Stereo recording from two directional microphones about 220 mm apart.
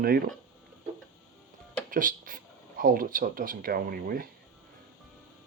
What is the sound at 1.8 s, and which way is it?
Speech, 40° right (ahead or behind).